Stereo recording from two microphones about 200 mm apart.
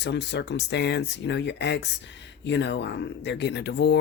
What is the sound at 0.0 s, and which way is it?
Speech, 60° left (ahead or behind).